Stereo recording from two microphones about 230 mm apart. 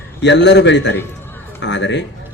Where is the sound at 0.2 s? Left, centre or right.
Left.